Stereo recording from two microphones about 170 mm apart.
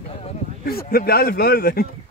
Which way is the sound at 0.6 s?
60° left (ahead or behind).